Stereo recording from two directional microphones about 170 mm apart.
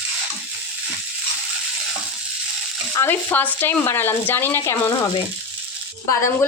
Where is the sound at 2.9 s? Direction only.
15° left (ahead or behind).